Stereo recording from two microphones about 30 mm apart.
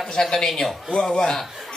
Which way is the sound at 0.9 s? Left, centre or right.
Left.